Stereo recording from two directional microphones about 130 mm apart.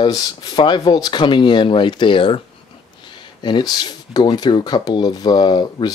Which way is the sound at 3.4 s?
35° left (ahead or behind).